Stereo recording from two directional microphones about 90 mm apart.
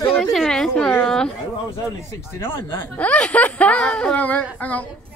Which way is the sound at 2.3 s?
30° left (ahead or behind).